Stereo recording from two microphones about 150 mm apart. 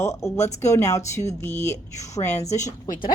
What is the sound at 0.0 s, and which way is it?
Speech, 20° left (ahead or behind).